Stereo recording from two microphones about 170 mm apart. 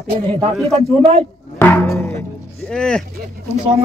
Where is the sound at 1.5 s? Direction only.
15° left (ahead or behind).